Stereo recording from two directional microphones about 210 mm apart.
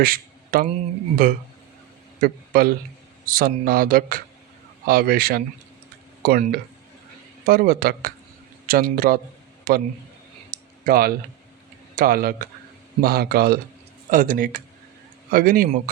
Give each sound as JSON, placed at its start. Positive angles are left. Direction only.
{"t": 0.0, "sound": "speech", "side_deg": -45}
{"t": 7.4, "sound": "speech", "side_deg": -45}
{"t": 10.5, "sound": "a sound", "side_deg": -45}
{"t": 11.9, "sound": "speech", "side_deg": -40}